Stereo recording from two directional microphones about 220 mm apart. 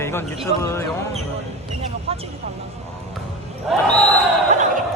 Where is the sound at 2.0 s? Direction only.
25° right (ahead or behind).